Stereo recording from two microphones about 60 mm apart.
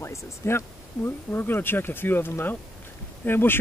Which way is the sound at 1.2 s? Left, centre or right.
Left.